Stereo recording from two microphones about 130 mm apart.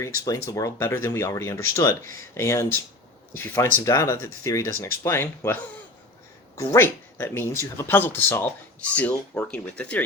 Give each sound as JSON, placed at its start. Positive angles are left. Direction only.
{"t": 0.3, "sound": "speech", "side_deg": 25}
{"t": 6.6, "sound": "speech", "side_deg": 20}